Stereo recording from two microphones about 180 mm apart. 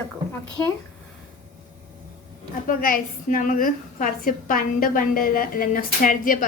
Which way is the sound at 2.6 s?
50° left (ahead or behind).